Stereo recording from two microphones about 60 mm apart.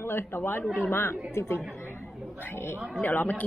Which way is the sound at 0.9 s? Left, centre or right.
Left.